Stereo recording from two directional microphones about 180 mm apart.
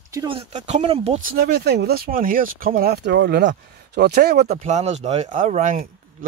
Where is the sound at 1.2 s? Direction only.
60° right (ahead or behind).